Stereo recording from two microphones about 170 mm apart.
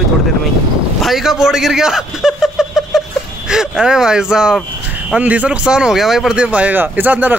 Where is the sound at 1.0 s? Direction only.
Centre (ahead or behind).